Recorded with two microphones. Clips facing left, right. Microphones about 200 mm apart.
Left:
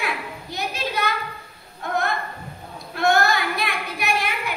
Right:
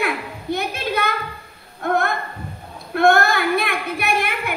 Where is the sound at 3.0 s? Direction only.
55° right (ahead or behind).